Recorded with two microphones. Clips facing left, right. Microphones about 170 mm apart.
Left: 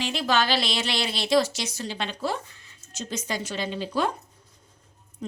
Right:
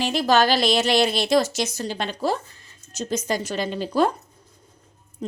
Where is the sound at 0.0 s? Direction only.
40° right (ahead or behind).